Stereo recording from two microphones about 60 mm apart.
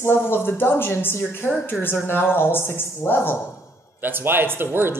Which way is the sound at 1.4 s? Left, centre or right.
Right.